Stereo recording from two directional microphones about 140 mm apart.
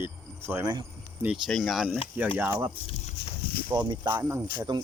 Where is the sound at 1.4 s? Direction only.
Centre (ahead or behind).